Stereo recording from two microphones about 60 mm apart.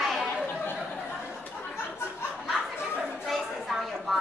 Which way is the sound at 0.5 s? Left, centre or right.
Left.